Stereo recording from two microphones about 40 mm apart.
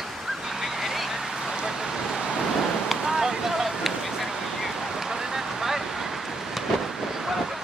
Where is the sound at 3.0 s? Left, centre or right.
Centre.